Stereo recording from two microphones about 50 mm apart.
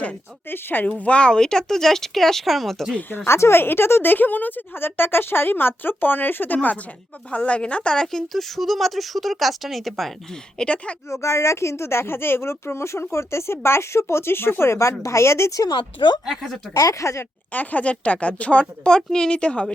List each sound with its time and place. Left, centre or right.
0.4 s speech: left; by 2.8 s centre
3.2 s speech: left
3.6 s speech: left
7.3 s speech: left
7.9 s speech: centre
10.6 s speech: left
11.1 s speech: left
14.6 s a woman's voice: left
16.2 s speech: centre
16.9 s speech: left
17.5 s speech: left